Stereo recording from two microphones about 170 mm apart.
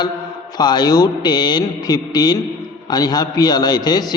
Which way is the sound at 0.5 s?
25° left (ahead or behind).